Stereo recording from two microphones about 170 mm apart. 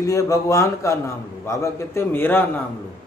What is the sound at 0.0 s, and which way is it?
A man's voice, 20° left (ahead or behind).